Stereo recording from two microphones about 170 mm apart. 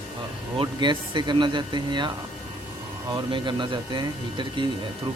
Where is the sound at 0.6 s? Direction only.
25° right (ahead or behind).